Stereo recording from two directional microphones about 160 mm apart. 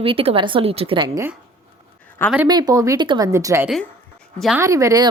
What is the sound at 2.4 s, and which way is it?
Speech, 25° right (ahead or behind).